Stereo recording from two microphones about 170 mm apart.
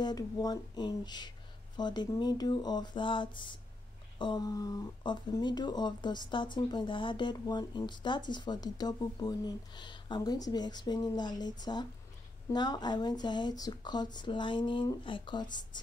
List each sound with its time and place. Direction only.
0.0 s speech: 25° left (ahead or behind)